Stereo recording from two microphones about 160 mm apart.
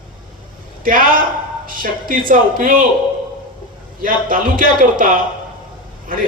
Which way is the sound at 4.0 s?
60° right (ahead or behind).